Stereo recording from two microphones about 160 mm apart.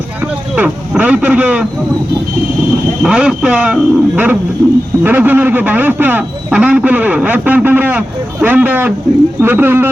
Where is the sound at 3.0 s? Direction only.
5° right (ahead or behind).